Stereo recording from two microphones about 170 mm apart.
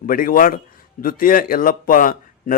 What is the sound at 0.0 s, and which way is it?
A man's voice, 55° left (ahead or behind).